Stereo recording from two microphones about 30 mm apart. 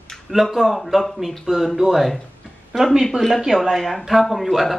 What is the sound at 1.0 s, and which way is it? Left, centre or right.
Speech, centre.